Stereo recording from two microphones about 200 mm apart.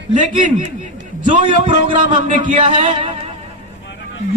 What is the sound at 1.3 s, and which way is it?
A man's voice, 25° right (ahead or behind).